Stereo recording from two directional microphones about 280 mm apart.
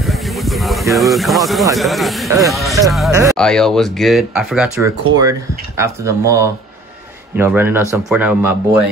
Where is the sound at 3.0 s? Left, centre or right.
Centre.